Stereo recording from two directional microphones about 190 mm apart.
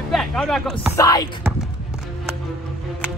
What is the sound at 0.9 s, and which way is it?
Music, 20° left (ahead or behind).